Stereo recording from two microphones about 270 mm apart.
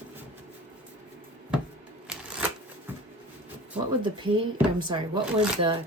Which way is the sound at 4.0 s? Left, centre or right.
Centre.